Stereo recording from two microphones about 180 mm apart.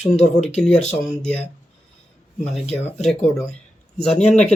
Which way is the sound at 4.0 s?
5° left (ahead or behind).